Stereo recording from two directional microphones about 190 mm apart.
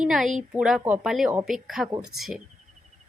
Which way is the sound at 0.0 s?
Centre (ahead or behind).